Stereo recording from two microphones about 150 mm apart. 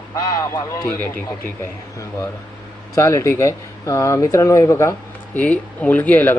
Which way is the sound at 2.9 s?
20° left (ahead or behind).